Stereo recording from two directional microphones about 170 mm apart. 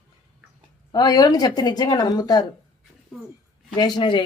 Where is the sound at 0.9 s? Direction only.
25° left (ahead or behind).